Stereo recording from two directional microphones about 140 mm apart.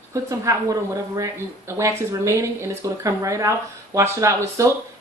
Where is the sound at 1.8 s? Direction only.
20° right (ahead or behind).